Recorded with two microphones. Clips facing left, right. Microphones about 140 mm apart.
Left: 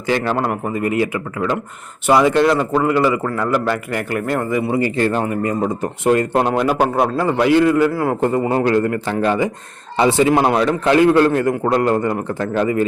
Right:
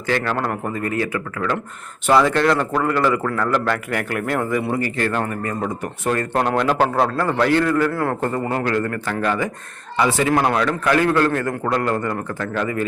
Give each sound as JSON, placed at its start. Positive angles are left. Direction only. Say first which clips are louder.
{"t": 0.1, "sound": "a man's voice", "louder": "left 3 dB", "side_deg": 15}
{"t": 4.8, "sound": "a man's voice", "louder": "left 4 dB", "side_deg": 25}
{"t": 6.5, "sound": "a man's voice", "louder": "left 2 dB", "side_deg": 5}
{"t": 6.7, "sound": "a man's voice", "louder": "left 2 dB", "side_deg": 15}